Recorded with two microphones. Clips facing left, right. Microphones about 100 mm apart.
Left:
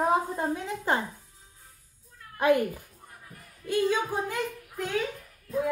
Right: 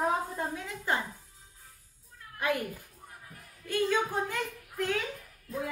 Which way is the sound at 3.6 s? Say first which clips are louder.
Left 3 dB; 15° left (ahead or behind).